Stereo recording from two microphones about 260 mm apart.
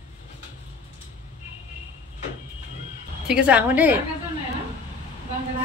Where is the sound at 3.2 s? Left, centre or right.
Centre.